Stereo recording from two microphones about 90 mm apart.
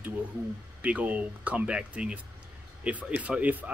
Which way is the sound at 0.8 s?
15° right (ahead or behind).